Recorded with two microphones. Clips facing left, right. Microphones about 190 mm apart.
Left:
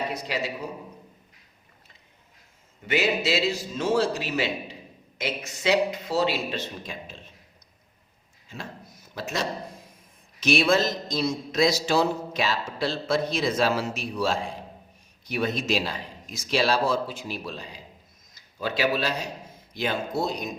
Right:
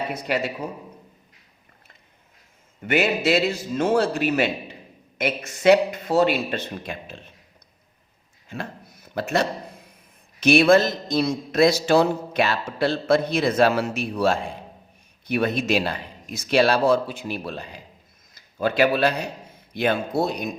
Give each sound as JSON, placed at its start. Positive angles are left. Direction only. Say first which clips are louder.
{"t": 0.1, "sound": "a man's voice", "louder": "right 4 dB", "side_deg": -55}
{"t": 2.8, "sound": "a man's voice", "louder": "right 4 dB", "side_deg": -55}
{"t": 8.4, "sound": "a sound", "louder": "right 5 dB", "side_deg": -60}
{"t": 10.4, "sound": "a man's voice", "louder": "right 6 dB", "side_deg": -60}